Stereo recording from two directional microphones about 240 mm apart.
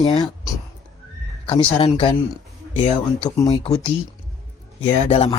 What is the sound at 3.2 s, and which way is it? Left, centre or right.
Speech, left.